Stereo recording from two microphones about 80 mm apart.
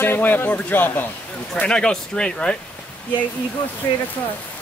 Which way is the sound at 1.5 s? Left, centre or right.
Centre.